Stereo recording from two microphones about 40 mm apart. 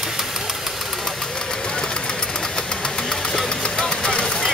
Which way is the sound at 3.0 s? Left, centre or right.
Centre.